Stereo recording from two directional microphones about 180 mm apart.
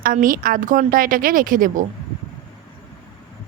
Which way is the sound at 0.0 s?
50° right (ahead or behind).